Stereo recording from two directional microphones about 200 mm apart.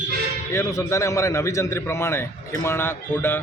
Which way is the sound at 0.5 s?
15° left (ahead or behind).